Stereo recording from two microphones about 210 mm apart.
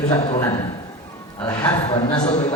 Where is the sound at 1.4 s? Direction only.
10° left (ahead or behind).